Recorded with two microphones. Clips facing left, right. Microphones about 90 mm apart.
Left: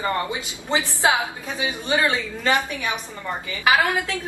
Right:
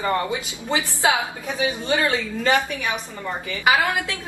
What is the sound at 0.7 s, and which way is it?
A woman's voice, 20° left (ahead or behind).